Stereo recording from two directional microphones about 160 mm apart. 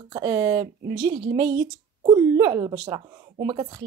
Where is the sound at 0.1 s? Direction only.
20° right (ahead or behind).